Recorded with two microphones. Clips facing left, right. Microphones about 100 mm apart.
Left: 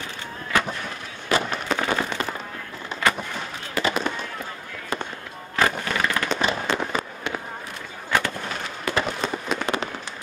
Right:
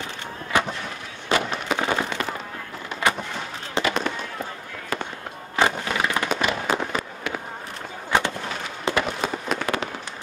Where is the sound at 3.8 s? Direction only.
25° right (ahead or behind).